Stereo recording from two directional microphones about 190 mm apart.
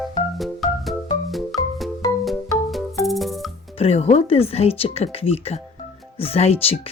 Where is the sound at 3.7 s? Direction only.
35° left (ahead or behind).